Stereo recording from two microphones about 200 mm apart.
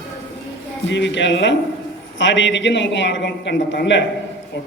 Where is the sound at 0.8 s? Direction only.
60° left (ahead or behind).